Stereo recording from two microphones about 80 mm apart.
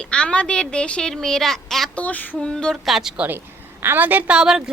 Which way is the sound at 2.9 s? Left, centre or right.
Centre.